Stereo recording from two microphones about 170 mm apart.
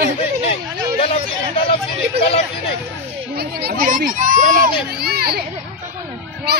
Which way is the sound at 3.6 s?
55° right (ahead or behind).